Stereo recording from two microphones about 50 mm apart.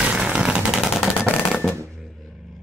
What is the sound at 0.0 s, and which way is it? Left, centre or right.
Vehicle, right.